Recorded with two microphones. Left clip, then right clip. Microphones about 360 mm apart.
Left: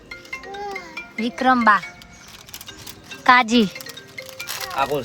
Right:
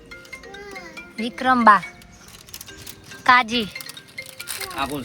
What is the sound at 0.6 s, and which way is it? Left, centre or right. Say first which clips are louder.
Music: left 7 dB; left.